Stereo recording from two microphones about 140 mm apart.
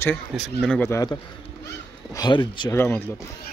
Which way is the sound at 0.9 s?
25° left (ahead or behind).